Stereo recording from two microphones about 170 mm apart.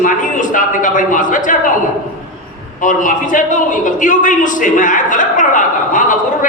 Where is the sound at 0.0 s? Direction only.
50° left (ahead or behind).